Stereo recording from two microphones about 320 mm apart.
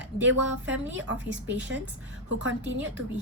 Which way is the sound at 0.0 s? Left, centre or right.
Right.